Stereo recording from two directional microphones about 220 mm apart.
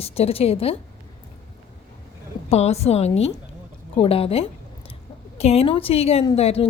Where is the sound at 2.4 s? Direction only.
30° left (ahead or behind).